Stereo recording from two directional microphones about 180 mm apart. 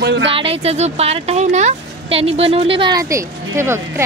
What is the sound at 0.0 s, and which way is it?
Speech, 80° right.